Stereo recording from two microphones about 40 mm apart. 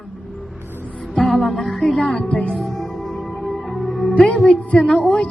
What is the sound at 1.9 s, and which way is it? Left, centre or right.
Speech, left.